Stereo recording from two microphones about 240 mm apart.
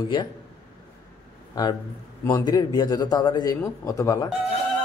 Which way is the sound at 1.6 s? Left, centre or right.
Centre.